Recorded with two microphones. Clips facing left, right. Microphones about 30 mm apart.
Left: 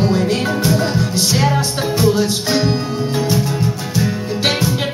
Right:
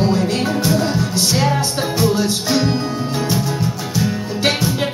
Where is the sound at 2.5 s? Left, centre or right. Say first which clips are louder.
Even; centre.